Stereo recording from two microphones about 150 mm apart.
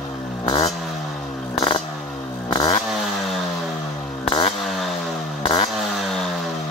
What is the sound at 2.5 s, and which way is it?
Motorcycle, 25° left (ahead or behind).